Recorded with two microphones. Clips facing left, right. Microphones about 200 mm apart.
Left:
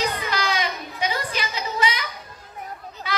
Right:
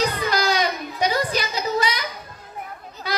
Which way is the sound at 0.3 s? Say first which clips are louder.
Right 4 dB; 40° right (ahead or behind).